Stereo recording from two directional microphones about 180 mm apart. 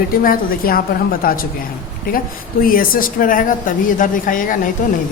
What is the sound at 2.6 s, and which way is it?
A woman's voice, 50° left (ahead or behind).